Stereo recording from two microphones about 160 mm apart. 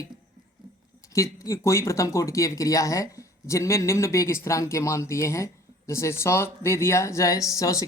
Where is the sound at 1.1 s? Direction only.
20° left (ahead or behind).